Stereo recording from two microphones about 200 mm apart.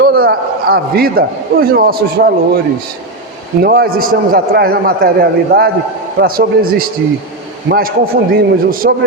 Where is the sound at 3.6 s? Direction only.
50° right (ahead or behind).